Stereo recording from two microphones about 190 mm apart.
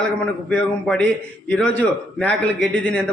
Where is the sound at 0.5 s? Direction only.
5° left (ahead or behind).